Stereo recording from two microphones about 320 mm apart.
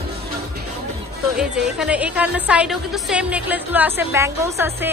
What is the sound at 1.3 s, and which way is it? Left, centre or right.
A woman's voice, centre.